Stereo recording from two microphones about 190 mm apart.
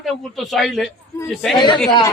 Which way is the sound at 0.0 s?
Centre (ahead or behind).